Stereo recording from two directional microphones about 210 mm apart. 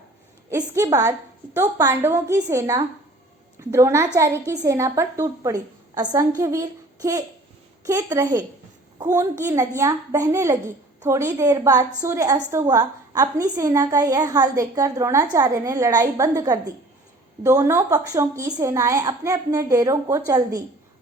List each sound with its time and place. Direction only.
0.5 s a woman's voice: 15° right (ahead or behind)